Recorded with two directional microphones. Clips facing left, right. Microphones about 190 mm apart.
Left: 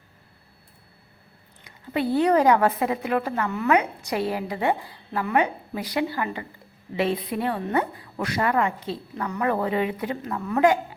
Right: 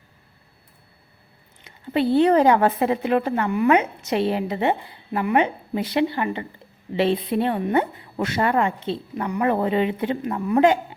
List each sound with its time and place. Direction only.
1.6 s a woman's voice: 25° right (ahead or behind)